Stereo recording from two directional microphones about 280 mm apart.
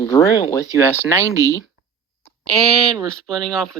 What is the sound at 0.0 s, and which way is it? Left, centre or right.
A woman's voice, centre.